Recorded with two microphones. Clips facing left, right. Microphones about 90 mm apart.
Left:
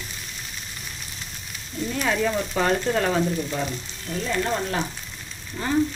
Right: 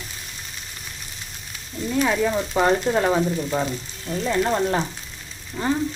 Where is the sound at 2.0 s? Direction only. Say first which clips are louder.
Left 1 dB; 15° right (ahead or behind).